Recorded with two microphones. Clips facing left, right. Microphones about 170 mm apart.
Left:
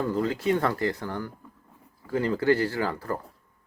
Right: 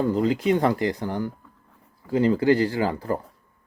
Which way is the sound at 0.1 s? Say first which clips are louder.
Right 4 dB; 20° right (ahead or behind).